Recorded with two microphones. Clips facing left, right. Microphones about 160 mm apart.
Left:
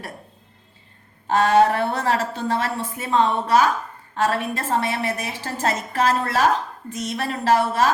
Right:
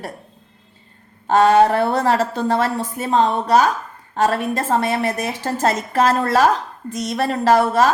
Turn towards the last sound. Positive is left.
turn(degrees=-40)  # may be behind; listen again after turning